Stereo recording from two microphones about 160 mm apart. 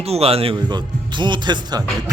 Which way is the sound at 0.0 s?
40° right (ahead or behind).